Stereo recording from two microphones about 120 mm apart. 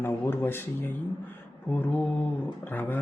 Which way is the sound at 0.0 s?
15° left (ahead or behind).